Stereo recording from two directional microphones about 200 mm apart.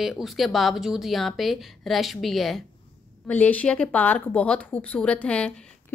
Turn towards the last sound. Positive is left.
turn(degrees=5)  # may be behind; listen again after turning